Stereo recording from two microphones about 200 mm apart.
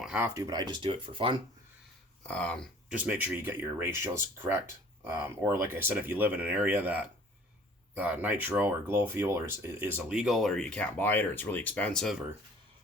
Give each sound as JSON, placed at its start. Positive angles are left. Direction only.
{"t": 0.0, "sound": "a sound", "side_deg": -5}
{"t": 0.3, "sound": "speech", "side_deg": -20}
{"t": 2.2, "sound": "speech", "side_deg": 5}
{"t": 2.9, "sound": "speech", "side_deg": -5}